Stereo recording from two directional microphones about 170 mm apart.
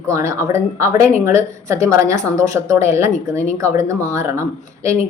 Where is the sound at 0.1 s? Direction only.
15° right (ahead or behind).